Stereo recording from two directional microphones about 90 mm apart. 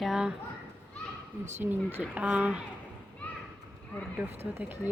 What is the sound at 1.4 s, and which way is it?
Speech, 25° right (ahead or behind).